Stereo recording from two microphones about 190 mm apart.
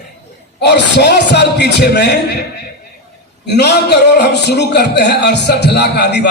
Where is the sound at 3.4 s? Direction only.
60° left (ahead or behind).